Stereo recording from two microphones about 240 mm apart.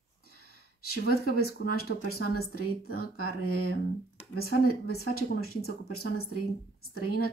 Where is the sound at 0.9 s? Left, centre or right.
Left.